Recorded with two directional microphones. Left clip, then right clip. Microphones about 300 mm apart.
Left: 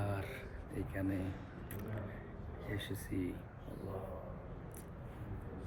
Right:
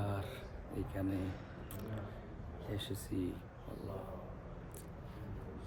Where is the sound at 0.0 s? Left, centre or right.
Centre.